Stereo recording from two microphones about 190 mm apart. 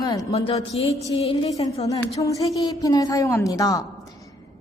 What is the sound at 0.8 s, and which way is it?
Music, 15° right (ahead or behind).